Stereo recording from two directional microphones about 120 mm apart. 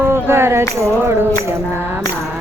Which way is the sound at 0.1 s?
20° right (ahead or behind).